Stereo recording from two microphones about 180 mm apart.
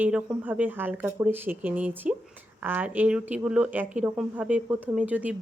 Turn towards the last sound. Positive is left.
turn(degrees=-10)  # may be behind; listen again after turning